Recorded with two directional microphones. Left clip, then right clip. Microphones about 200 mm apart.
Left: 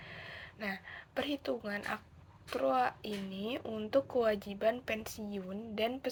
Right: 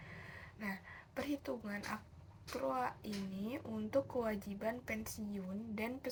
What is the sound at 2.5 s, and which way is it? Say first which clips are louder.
A woman's voice: left 7 dB; 30° left (ahead or behind).